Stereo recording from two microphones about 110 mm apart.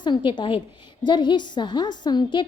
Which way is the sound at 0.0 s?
45° left (ahead or behind).